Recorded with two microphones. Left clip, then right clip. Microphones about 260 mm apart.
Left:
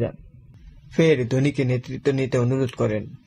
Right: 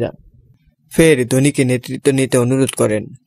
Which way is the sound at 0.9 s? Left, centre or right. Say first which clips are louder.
Right 7 dB; right.